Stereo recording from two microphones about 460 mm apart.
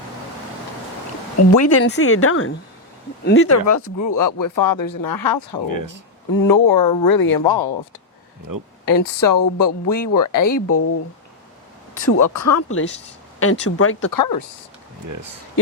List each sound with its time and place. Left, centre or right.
1.4 s speech: left
5.6 s speech: right
6.4 s speech: left
8.8 s speech: left
12.1 s speech: left
14.1 s speech: left
15.0 s speech: right